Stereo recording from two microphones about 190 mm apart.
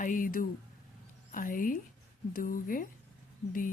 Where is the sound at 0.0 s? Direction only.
45° left (ahead or behind).